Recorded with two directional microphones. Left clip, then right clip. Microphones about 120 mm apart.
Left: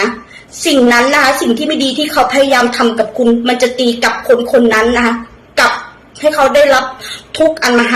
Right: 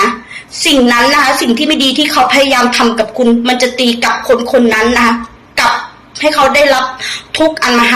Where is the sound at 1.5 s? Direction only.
25° left (ahead or behind).